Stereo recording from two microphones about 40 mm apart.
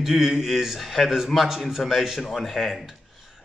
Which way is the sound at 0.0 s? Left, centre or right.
Centre.